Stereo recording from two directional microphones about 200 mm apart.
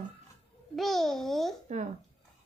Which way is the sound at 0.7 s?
Centre (ahead or behind).